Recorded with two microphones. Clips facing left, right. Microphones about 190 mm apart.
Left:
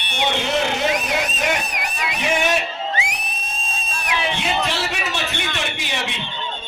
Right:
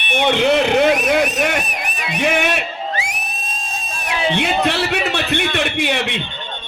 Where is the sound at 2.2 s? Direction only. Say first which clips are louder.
Right 3 dB; 60° right (ahead or behind).